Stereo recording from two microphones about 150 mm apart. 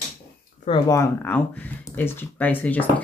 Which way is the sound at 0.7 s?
45° left (ahead or behind).